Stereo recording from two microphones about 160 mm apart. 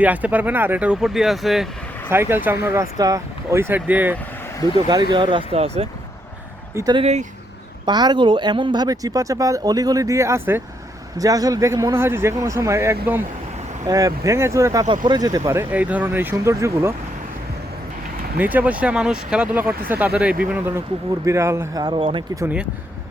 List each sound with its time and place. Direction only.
0.0 s speech: 10° right (ahead or behind)
2.0 s speech: 15° right (ahead or behind)
5.1 s speech: 30° right (ahead or behind)
6.7 s speech: 25° right (ahead or behind)
7.0 s speech: 45° right (ahead or behind)
7.9 s speech: 25° right (ahead or behind)
18.3 s speech: 10° right (ahead or behind); by 22.2 s 30° right (ahead or behind)
22.4 s speech: 10° right (ahead or behind)